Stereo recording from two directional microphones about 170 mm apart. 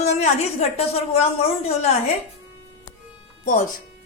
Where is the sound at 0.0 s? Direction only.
40° left (ahead or behind).